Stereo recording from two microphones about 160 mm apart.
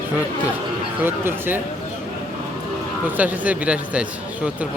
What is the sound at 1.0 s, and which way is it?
Speech, 15° right (ahead or behind).